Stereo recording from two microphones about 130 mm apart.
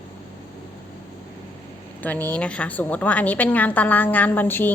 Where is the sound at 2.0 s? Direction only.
15° left (ahead or behind).